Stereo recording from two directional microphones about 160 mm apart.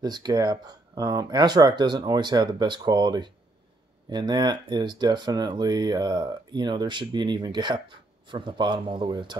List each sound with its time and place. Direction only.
0.0 s speech: 25° right (ahead or behind)